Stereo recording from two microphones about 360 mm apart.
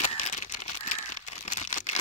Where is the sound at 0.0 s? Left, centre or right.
Centre.